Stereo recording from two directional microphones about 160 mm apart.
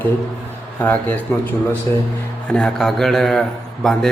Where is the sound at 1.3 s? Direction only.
15° left (ahead or behind).